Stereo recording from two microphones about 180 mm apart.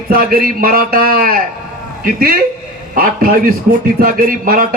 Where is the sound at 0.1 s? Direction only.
55° right (ahead or behind).